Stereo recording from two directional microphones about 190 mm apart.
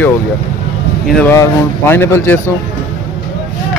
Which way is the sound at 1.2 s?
15° left (ahead or behind).